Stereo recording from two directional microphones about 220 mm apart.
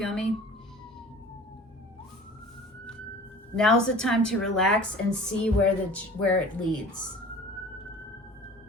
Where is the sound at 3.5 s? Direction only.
5° left (ahead or behind).